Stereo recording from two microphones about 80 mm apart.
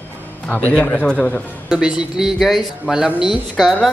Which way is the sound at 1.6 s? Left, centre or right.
Centre.